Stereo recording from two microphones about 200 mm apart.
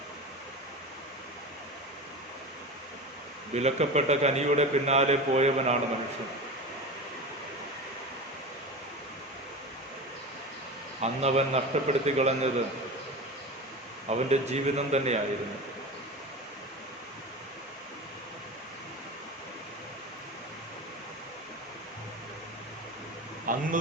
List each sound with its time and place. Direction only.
3.5 s a man's voice: 35° right (ahead or behind)
11.0 s a man's voice: 30° right (ahead or behind)
14.1 s a man's voice: 35° right (ahead or behind)
23.5 s a sound: 45° right (ahead or behind)